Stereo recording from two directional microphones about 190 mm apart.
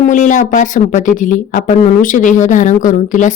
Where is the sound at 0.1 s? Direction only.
40° left (ahead or behind).